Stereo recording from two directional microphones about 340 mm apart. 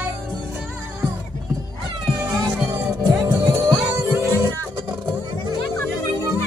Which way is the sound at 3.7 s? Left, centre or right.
Centre.